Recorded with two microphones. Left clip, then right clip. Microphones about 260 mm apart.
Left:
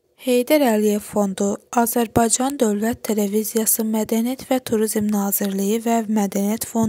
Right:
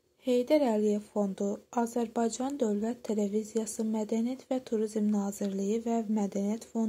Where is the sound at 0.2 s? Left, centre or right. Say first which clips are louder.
Left 9 dB; left.